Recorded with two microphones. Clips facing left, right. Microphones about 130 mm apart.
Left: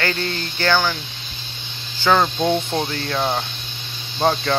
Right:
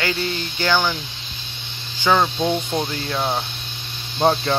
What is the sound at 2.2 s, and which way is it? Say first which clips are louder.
Speech: left 1 dB; centre (ahead or behind).